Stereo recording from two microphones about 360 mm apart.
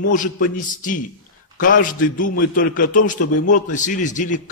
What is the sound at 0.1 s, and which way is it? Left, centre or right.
A man's voice, left.